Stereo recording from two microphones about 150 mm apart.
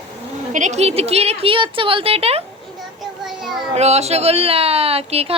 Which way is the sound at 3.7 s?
45° right (ahead or behind).